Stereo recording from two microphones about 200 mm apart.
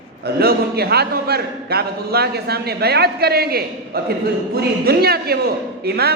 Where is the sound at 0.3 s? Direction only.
50° right (ahead or behind).